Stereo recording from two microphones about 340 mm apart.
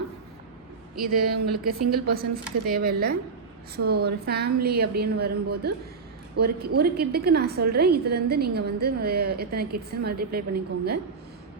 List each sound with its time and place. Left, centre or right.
1.0 s a woman's voice: right